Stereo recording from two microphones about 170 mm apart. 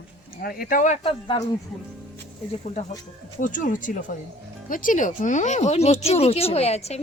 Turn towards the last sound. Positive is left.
turn(degrees=40)  # may be behind; listen again after turning